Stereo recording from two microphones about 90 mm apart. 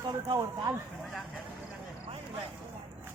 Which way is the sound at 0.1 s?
45° right (ahead or behind).